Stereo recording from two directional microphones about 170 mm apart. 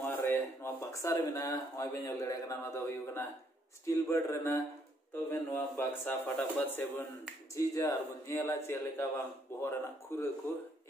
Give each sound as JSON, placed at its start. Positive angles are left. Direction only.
{"t": 0.0, "sound": "a man's voice", "side_deg": 10}